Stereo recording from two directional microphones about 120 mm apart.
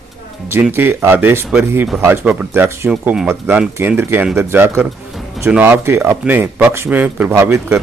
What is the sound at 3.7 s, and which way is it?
Speech, 20° right (ahead or behind).